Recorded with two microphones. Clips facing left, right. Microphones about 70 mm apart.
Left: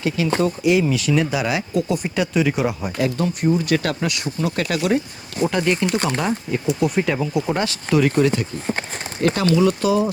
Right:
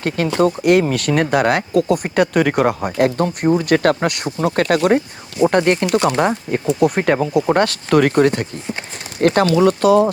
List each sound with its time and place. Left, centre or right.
0.3 s speech: right